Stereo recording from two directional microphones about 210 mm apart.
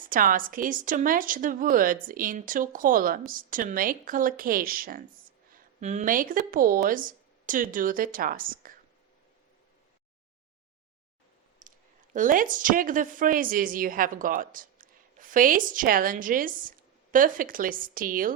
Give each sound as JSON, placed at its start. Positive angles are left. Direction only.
{"t": 0.1, "sound": "a woman's voice", "side_deg": -40}
{"t": 11.6, "sound": "clicking", "side_deg": -40}
{"t": 12.1, "sound": "a woman's voice", "side_deg": -40}